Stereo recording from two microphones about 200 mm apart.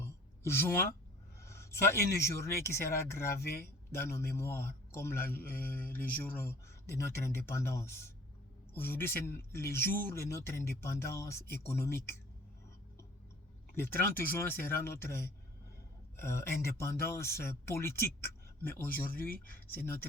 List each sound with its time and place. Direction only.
0.0 s a sound: 15° left (ahead or behind)
1.4 s a man's voice: 15° left (ahead or behind)
13.7 s speech: 10° left (ahead or behind)
19.0 s speech: 45° left (ahead or behind)
19.7 s speech: 10° left (ahead or behind)